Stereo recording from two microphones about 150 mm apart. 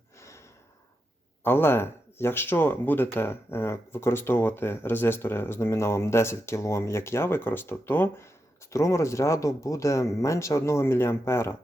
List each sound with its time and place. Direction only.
0.2 s gasp: 20° left (ahead or behind)
1.5 s speech: 15° left (ahead or behind)